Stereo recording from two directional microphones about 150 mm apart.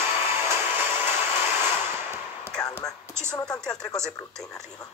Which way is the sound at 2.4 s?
5° left (ahead or behind).